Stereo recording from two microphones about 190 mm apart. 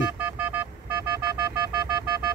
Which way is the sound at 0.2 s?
10° right (ahead or behind).